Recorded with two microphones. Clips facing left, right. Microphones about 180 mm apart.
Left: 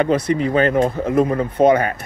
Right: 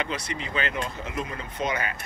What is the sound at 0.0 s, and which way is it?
Speech, 55° left (ahead or behind).